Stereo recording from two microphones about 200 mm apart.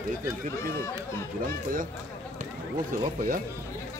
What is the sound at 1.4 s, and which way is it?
Speech, 45° right (ahead or behind).